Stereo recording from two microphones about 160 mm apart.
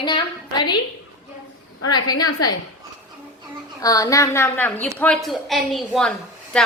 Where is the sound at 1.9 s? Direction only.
25° left (ahead or behind).